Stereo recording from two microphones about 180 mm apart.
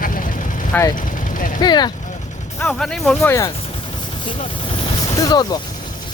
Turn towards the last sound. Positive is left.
turn(degrees=25)  # may be behind; listen again after turning